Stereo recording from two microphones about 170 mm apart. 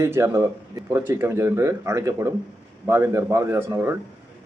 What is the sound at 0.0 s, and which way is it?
A man's voice, 15° right (ahead or behind).